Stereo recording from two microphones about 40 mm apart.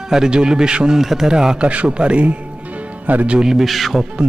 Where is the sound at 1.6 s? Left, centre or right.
Right.